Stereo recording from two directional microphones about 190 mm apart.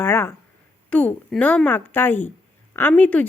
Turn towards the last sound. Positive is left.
turn(degrees=5)  # may be behind; listen again after turning